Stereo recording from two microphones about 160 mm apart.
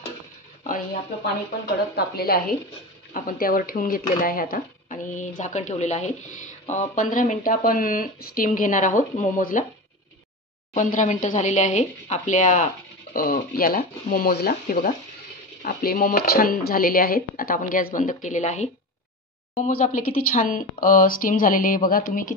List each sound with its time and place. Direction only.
2.0 s a woman's voice: 80° left
3.1 s speech: 60° left (ahead or behind)
10.7 s speech: 55° left (ahead or behind)